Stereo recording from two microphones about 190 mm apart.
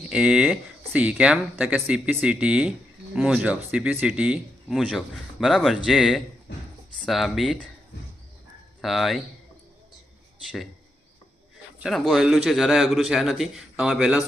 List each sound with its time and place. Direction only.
0.1 s speech: 5° right (ahead or behind)
6.5 s a sound: 65° left (ahead or behind)
7.0 s speech: centre (ahead or behind)
8.8 s speech: centre (ahead or behind)
11.8 s speech: centre (ahead or behind)